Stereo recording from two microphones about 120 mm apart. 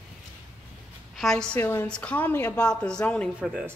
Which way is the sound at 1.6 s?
20° left (ahead or behind).